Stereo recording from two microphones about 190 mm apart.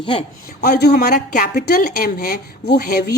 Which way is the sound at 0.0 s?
25° left (ahead or behind).